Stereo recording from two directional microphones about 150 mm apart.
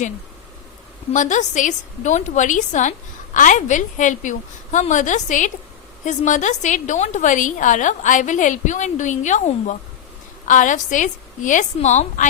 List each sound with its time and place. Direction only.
1.1 s a woman's voice: 55° left (ahead or behind)